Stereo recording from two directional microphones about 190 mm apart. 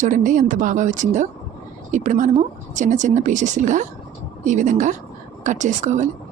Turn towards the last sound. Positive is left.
turn(degrees=-40)  # may be behind; listen again after turning